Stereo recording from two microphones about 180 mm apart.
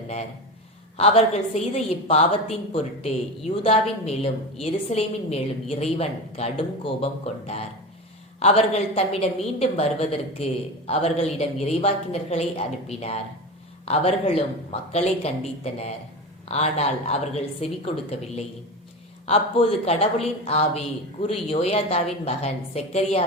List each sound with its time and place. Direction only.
0.9 s speech: 35° left (ahead or behind)
19.2 s speech: 35° left (ahead or behind)